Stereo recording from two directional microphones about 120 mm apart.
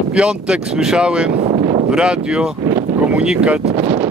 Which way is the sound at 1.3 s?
60° right (ahead or behind).